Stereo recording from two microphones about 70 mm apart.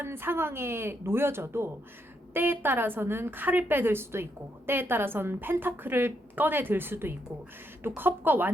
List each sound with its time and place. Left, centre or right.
0.0 s a woman's voice: right